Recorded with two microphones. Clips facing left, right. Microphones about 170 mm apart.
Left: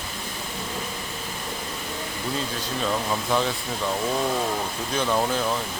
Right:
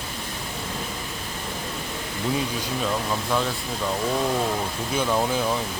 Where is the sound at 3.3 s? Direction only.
Centre (ahead or behind).